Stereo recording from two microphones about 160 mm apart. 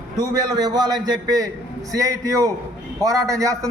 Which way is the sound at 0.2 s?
25° right (ahead or behind).